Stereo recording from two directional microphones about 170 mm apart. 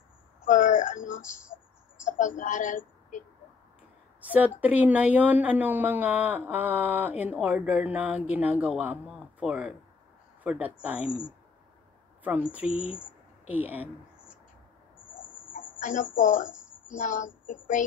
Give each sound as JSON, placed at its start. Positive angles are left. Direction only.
{"t": 0.5, "sound": "a sound", "side_deg": 50}
{"t": 2.0, "sound": "a woman's voice", "side_deg": 50}
{"t": 4.2, "sound": "a woman's voice", "side_deg": -10}
{"t": 13.5, "sound": "speech", "side_deg": -10}
{"t": 15.5, "sound": "speech", "side_deg": 50}
{"t": 16.4, "sound": "a sound", "side_deg": -5}
{"t": 16.9, "sound": "speech", "side_deg": 50}